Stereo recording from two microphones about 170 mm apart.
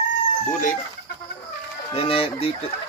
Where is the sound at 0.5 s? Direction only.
50° left (ahead or behind).